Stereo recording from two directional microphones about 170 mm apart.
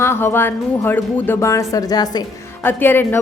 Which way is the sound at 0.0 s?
15° left (ahead or behind).